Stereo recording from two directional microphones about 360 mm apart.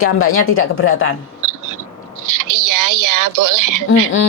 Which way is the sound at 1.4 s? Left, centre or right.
Right.